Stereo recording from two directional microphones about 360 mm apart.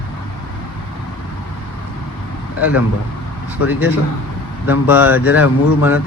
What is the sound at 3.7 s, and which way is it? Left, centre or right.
Speech, centre.